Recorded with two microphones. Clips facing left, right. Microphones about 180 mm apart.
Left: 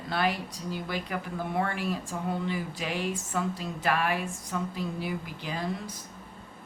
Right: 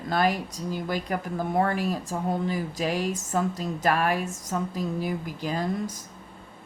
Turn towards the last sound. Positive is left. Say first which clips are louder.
# right 5 dB
turn(degrees=-45)  # may be behind; listen again after turning